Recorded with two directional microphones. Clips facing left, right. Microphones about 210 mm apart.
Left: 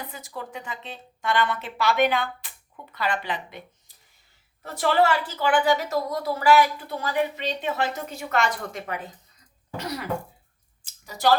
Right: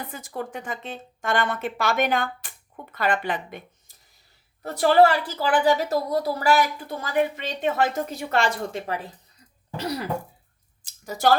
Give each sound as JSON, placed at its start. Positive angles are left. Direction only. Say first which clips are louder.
{"t": 0.1, "sound": "a woman's voice", "louder": "right 4 dB", "side_deg": -50}
{"t": 4.6, "sound": "a woman's voice", "louder": "right 5 dB", "side_deg": -35}
{"t": 8.1, "sound": "a woman's voice", "louder": "right 2 dB", "side_deg": -35}
{"t": 11.0, "sound": "speech", "louder": "right 1 dB", "side_deg": -50}